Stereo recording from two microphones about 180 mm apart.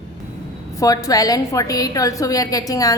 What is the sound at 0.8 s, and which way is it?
A woman's voice, 20° left (ahead or behind).